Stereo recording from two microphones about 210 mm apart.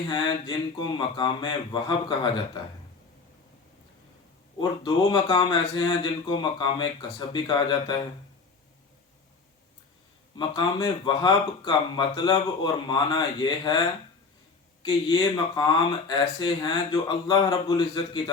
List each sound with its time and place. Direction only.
0.1 s speech: 25° left (ahead or behind)
4.8 s speech: 20° left (ahead or behind)
10.3 s speech: 20° left (ahead or behind)